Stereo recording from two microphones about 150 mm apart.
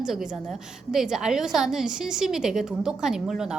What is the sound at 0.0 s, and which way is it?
A woman's voice, 5° right (ahead or behind).